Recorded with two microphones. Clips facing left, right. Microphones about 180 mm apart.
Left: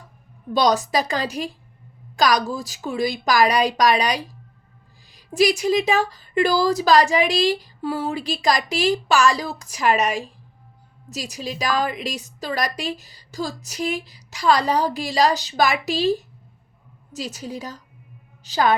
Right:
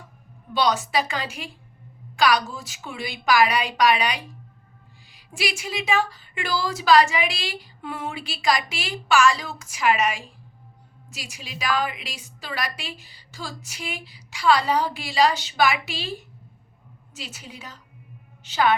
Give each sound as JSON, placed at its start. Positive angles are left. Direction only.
{"t": 0.5, "sound": "a woman's voice", "side_deg": 40}